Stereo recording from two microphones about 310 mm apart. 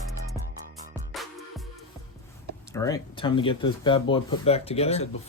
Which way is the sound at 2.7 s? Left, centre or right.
Centre.